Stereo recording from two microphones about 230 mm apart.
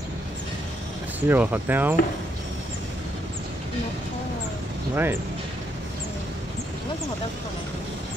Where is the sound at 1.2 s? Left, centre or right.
Centre.